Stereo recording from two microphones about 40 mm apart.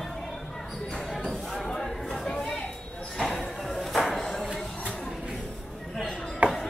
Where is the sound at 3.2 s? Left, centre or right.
Centre.